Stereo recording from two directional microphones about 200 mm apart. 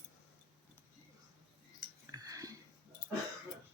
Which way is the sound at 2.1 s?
20° right (ahead or behind).